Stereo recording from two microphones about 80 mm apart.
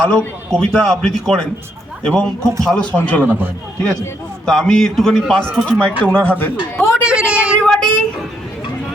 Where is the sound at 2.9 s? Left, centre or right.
Centre.